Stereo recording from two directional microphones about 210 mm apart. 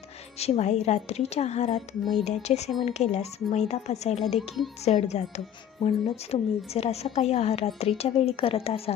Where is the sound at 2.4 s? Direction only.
30° left (ahead or behind).